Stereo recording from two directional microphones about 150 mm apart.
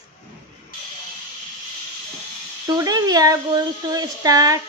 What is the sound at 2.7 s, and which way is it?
A woman's voice, 25° right (ahead or behind).